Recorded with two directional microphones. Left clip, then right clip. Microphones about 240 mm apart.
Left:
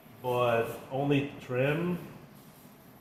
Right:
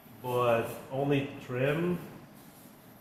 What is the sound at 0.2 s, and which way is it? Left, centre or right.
Speech, centre.